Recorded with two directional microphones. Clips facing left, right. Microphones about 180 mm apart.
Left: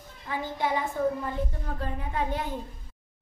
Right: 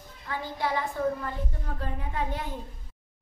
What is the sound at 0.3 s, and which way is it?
A child's voice, 15° left (ahead or behind).